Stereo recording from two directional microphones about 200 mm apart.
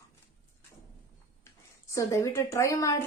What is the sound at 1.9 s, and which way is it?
A woman's voice, 15° left (ahead or behind).